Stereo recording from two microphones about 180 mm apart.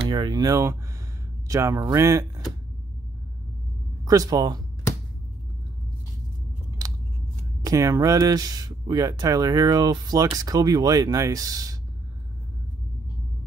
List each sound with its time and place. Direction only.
0.1 s speech: 25° right (ahead or behind)
4.0 s speech: 20° right (ahead or behind)
6.8 s scissors: 20° right (ahead or behind)
7.6 s speech: 20° right (ahead or behind)